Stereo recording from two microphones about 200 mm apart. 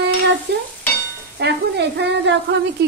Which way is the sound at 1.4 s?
55° right (ahead or behind).